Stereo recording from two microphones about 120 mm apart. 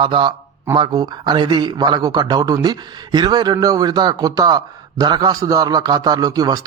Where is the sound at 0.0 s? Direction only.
45° right (ahead or behind).